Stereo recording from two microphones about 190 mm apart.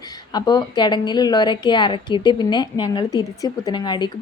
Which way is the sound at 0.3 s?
20° left (ahead or behind).